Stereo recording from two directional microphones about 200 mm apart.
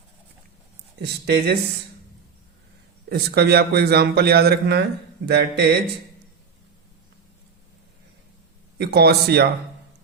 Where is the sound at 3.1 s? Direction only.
55° right (ahead or behind).